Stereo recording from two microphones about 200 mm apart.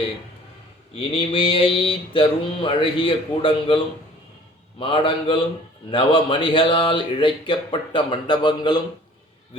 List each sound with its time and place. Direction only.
0.9 s speech: 25° left (ahead or behind)
4.8 s speech: 25° left (ahead or behind)